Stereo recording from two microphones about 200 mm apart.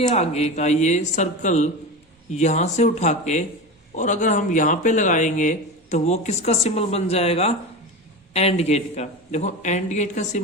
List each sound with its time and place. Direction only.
0.0 s speech: 30° left (ahead or behind)